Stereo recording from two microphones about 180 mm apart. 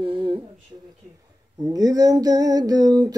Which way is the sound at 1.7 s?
20° right (ahead or behind).